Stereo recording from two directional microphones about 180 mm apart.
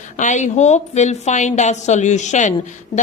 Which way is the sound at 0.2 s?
40° left (ahead or behind).